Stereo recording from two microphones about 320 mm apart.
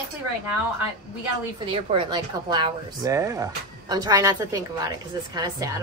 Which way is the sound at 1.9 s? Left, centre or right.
Centre.